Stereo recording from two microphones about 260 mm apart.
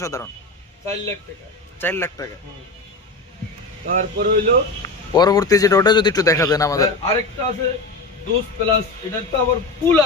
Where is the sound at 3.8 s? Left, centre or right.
Right.